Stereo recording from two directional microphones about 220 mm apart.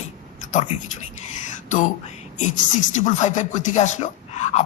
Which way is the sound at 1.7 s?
35° left (ahead or behind).